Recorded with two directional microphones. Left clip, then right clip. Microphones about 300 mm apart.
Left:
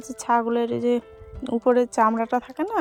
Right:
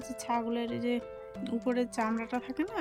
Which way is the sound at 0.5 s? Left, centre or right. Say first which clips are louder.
Left 11 dB; centre.